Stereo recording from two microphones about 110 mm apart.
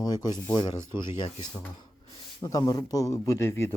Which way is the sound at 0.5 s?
45° left (ahead or behind).